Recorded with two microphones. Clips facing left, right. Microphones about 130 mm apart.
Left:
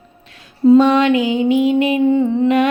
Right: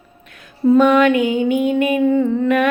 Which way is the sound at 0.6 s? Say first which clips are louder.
Left 1 dB; 30° left (ahead or behind).